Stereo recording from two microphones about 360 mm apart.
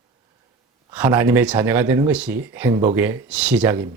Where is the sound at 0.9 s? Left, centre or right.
Centre.